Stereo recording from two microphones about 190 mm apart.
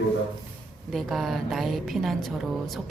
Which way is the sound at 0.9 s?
Centre (ahead or behind).